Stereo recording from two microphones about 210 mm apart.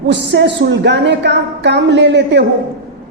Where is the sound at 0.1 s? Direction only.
55° right (ahead or behind).